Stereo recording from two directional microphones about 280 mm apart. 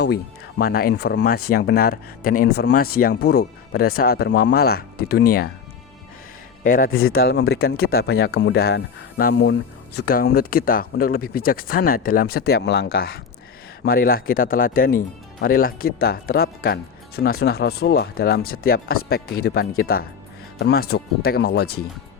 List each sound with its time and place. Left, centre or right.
0.6 s speech: left
6.7 s speech: left